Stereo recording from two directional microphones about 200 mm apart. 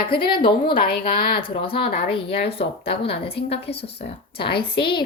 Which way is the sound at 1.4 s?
25° left (ahead or behind).